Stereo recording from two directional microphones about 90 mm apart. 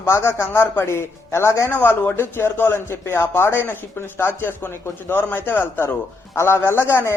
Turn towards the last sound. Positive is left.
turn(degrees=25)  # may be behind; listen again after turning